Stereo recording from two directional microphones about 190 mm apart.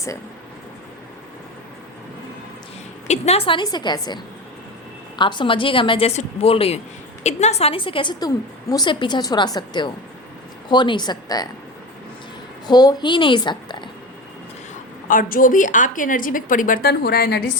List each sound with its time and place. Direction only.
3.1 s a woman's voice: 35° left (ahead or behind)
12.6 s a woman's voice: 20° left (ahead or behind)
15.0 s a woman's voice: 45° left (ahead or behind)